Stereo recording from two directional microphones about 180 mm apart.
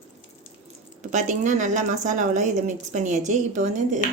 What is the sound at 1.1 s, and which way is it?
A woman's voice, 45° right (ahead or behind).